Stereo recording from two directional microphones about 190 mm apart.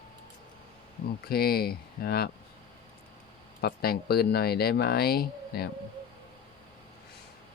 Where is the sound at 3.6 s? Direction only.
55° left (ahead or behind).